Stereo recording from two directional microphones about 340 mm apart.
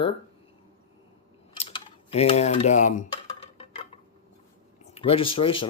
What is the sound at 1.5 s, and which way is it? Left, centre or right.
Speech, centre.